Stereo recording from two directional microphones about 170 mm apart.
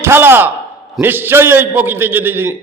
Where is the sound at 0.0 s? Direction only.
15° right (ahead or behind).